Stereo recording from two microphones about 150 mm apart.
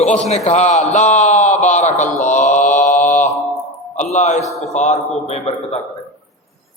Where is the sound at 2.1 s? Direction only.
55° left (ahead or behind).